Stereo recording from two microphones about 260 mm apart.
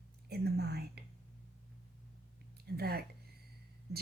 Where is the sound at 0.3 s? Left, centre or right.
Right.